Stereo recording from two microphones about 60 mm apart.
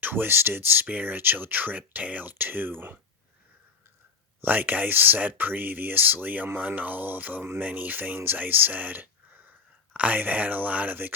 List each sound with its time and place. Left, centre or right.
0.0 s speech: right
4.4 s speech: right